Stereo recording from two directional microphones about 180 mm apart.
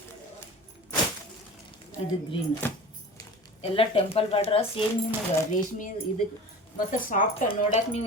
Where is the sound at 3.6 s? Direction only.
30° left (ahead or behind).